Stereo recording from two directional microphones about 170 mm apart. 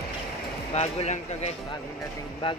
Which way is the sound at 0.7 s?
40° left (ahead or behind).